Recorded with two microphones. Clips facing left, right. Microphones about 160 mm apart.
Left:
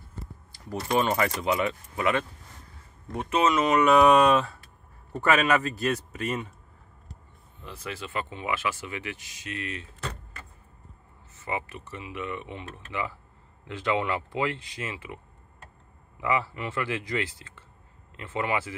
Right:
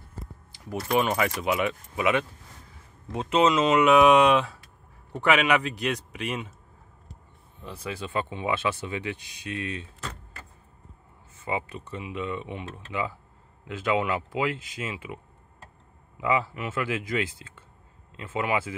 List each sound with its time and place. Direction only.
0.9 s speech: 5° right (ahead or behind)
3.1 s speech: 25° right (ahead or behind)
3.7 s a man's voice: centre (ahead or behind)
7.7 s speech: 15° right (ahead or behind)
11.3 s speech: 15° right (ahead or behind)
16.2 s speech: 15° right (ahead or behind)